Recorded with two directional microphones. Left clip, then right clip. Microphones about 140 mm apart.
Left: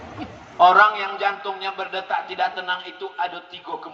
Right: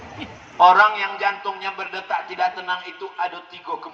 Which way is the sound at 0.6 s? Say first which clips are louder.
Right 1 dB; 20° left (ahead or behind).